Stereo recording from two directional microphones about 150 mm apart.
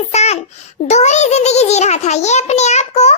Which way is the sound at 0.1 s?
45° left (ahead or behind).